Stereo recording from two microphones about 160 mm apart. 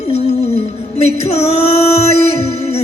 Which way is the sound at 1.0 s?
40° left (ahead or behind).